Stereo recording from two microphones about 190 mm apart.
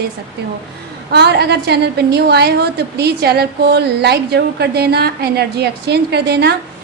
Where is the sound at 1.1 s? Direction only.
60° right (ahead or behind).